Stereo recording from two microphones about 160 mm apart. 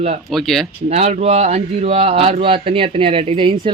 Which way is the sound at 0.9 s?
40° right (ahead or behind).